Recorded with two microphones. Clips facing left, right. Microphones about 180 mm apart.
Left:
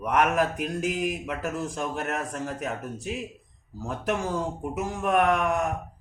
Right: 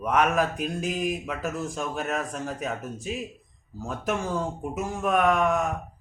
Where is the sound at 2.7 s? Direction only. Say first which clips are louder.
Even; 15° left (ahead or behind).